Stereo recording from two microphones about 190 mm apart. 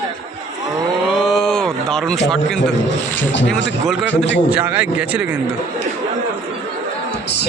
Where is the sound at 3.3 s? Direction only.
70° left (ahead or behind).